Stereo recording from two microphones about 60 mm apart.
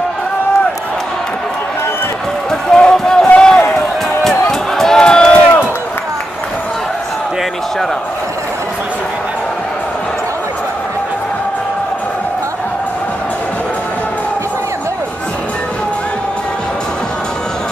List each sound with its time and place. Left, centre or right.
2.7 s run: centre
3.3 s a sound: centre
4.2 s music: centre